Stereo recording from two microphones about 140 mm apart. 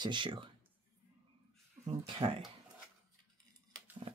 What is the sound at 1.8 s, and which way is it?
Speech, 40° right (ahead or behind).